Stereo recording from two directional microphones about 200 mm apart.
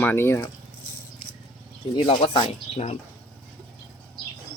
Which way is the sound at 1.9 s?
25° left (ahead or behind).